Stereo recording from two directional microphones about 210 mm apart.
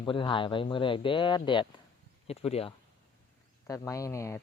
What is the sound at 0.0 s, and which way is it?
Speech, 25° left (ahead or behind).